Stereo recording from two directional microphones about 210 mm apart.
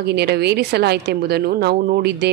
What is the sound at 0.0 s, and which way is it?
Speech, 50° right (ahead or behind).